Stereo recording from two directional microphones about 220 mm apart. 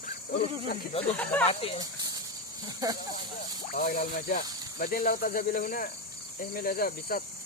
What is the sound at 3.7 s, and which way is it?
Cricket, 40° left (ahead or behind).